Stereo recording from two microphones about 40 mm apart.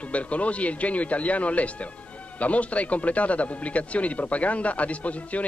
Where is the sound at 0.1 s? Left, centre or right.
Left.